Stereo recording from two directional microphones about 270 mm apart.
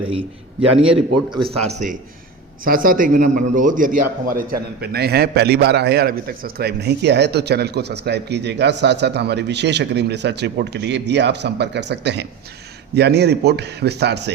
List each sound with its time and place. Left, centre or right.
0.0 s a man's voice: centre; by 14.2 s right